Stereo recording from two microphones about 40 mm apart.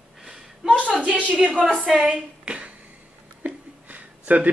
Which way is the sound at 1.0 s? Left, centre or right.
Right.